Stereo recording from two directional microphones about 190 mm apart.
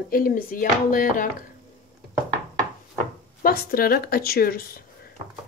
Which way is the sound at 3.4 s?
50° left (ahead or behind).